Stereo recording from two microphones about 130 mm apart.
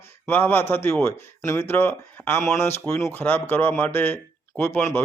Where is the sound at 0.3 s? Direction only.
15° left (ahead or behind).